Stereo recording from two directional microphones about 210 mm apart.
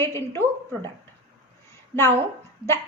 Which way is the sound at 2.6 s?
25° right (ahead or behind).